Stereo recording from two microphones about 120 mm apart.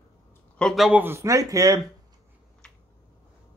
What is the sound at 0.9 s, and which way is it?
Speech, 15° right (ahead or behind).